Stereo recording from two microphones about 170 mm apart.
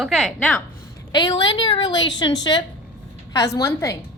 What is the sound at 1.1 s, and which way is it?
A woman's voice, 25° left (ahead or behind).